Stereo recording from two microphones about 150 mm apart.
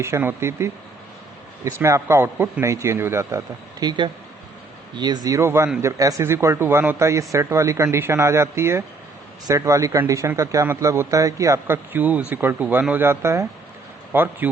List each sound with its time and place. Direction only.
0.0 s speech: 15° right (ahead or behind)